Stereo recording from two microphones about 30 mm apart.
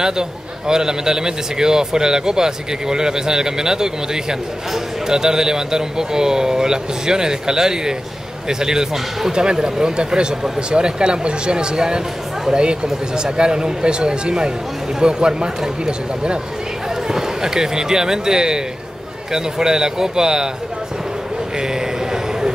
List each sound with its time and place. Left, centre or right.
0.0 s a man's voice: right
17.1 s a man's voice: centre
21.5 s a sound: centre